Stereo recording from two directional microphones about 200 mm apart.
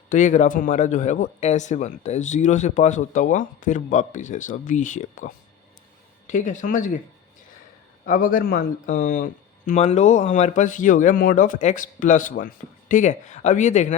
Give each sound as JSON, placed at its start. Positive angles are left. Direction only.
{"t": 0.1, "sound": "speech", "side_deg": 40}
{"t": 8.0, "sound": "speech", "side_deg": 40}